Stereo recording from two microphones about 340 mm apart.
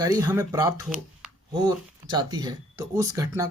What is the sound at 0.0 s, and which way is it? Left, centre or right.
Speech, centre.